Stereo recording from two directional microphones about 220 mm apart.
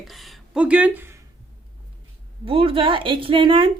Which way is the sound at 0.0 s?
Centre (ahead or behind).